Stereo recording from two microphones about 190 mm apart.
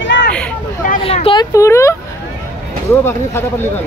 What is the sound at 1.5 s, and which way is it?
Speech, 15° left (ahead or behind).